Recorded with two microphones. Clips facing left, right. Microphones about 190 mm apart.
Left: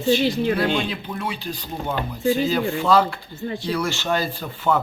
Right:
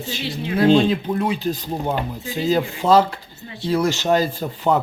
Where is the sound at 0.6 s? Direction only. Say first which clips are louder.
Right 8 dB; 30° right (ahead or behind).